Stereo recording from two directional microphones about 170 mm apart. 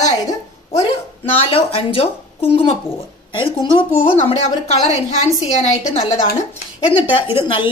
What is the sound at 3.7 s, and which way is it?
A woman's voice, 30° left (ahead or behind).